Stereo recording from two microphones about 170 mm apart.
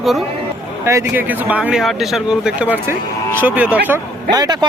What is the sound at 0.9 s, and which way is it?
Speech, 15° right (ahead or behind).